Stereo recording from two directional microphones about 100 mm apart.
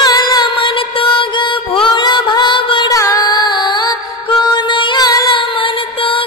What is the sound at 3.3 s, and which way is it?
Music, 50° left (ahead or behind).